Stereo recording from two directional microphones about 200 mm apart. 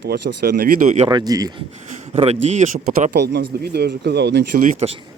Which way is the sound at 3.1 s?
55° right (ahead or behind).